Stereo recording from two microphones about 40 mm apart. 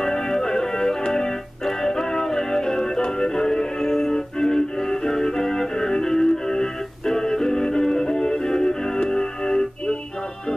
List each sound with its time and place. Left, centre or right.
0.0 s organ: centre